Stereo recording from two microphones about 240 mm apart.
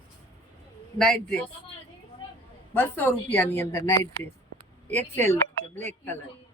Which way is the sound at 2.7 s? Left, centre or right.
Centre.